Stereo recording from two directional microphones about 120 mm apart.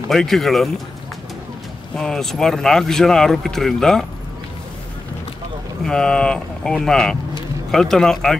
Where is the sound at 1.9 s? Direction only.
5° left (ahead or behind).